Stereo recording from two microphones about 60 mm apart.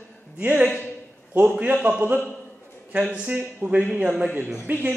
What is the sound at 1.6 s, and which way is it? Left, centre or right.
A man's voice, right.